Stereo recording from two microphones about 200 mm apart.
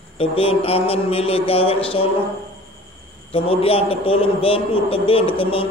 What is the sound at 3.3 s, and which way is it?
A man's voice, 30° left (ahead or behind).